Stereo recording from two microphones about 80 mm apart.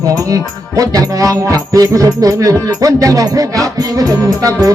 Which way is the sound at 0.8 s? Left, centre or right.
Right.